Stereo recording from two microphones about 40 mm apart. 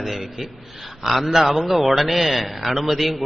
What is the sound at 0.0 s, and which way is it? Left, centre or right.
A man's voice, centre.